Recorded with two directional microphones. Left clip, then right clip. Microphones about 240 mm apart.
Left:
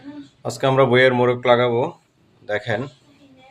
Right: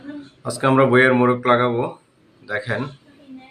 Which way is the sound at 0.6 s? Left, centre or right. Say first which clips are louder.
Even; left.